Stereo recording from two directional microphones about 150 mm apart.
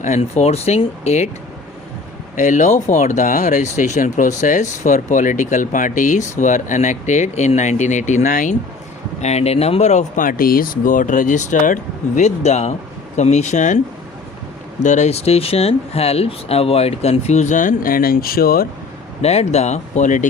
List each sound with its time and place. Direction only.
0.0 s speech: 50° left (ahead or behind)
2.3 s speech: 55° left (ahead or behind); by 18.7 s 80° left
19.2 s speech: 45° left (ahead or behind)